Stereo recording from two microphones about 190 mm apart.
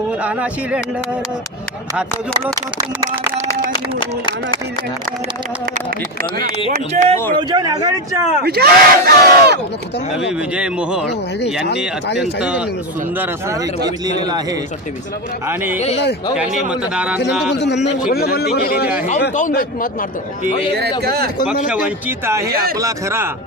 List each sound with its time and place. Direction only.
0.2 s speech: 5° right (ahead or behind)
2.7 s speech: 20° right (ahead or behind)
4.0 s speech: 25° left (ahead or behind)
6.7 s speech: 40° right (ahead or behind)
7.3 s speech: 20° right (ahead or behind)
8.4 s speech: 55° right (ahead or behind)
10.5 s speech: 5° right (ahead or behind)
12.2 s speech: 5° right (ahead or behind)
15.4 s speech: 10° right (ahead or behind)
17.5 s a man's voice: 65° left (ahead or behind); by 20.1 s 45° left (ahead or behind)
21.0 s speech: 55° right (ahead or behind)
21.7 s speech: 10° right (ahead or behind)